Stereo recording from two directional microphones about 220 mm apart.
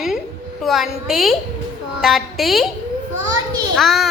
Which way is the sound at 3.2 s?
15° right (ahead or behind).